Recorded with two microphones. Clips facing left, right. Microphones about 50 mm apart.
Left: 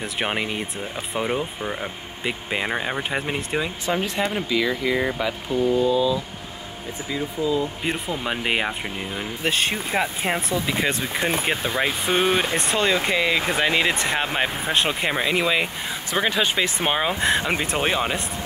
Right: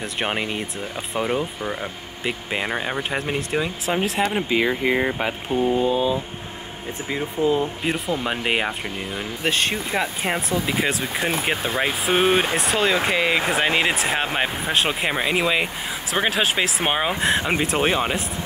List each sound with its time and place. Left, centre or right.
0.0 s speech: centre
4.2 s speech: centre
4.5 s speech: right
7.8 s speech: centre